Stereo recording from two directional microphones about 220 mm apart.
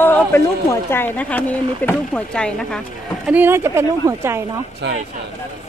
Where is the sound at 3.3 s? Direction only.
10° right (ahead or behind).